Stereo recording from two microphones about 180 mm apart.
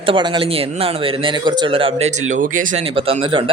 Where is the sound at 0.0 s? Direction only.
30° right (ahead or behind); by 2.8 s 45° right (ahead or behind).